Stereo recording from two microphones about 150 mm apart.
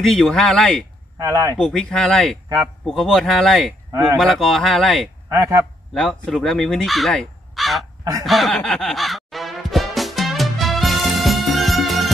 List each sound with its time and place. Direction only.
0.2 s speech: 5° left (ahead or behind)
1.1 s speech: 25° right (ahead or behind)
1.6 s speech: 5° left (ahead or behind)
5.3 s speech: 20° right (ahead or behind)
5.9 s speech: centre (ahead or behind)
8.0 s speech: 25° right (ahead or behind)
8.3 s music: centre (ahead or behind)